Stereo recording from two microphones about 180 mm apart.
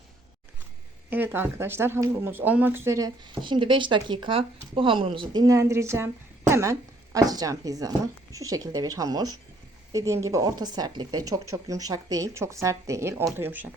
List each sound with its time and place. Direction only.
1.1 s speech: 10° right (ahead or behind)